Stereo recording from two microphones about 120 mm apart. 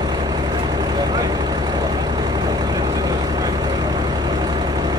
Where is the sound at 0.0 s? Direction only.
35° right (ahead or behind).